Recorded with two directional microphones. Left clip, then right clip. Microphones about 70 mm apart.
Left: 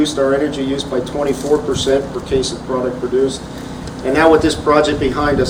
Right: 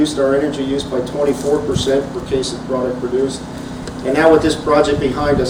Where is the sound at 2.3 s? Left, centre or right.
Left.